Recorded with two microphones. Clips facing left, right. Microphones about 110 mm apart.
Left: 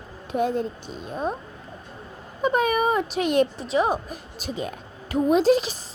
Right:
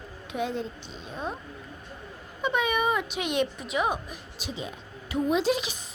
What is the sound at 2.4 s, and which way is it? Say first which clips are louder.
Speech: left 5 dB; 40° left (ahead or behind).